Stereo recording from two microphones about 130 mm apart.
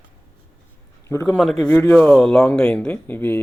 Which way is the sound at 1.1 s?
20° left (ahead or behind).